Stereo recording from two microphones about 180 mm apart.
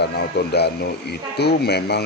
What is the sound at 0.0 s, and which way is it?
Speech, 65° left (ahead or behind).